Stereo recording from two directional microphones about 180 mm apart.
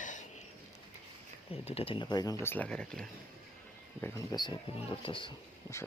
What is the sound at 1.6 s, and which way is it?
Speech, 30° left (ahead or behind).